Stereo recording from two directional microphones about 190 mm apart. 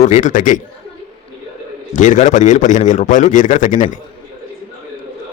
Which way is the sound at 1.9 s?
40° left (ahead or behind).